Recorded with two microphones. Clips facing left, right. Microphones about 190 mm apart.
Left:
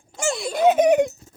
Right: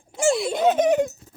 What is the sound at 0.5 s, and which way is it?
Speech, 10° left (ahead or behind).